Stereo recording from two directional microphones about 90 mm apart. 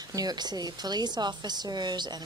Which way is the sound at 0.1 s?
45° right (ahead or behind).